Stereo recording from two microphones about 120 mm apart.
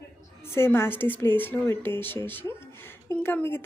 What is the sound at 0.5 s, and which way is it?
Speech, 20° left (ahead or behind).